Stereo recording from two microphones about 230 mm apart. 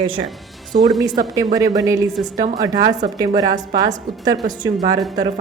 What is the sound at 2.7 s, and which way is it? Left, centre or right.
Speech, right.